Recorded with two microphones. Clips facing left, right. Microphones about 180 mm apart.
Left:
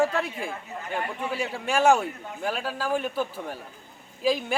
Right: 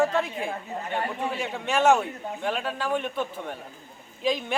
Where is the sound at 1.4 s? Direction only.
10° left (ahead or behind).